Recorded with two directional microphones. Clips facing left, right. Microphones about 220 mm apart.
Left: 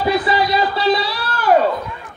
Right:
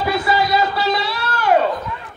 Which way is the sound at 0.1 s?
25° right (ahead or behind).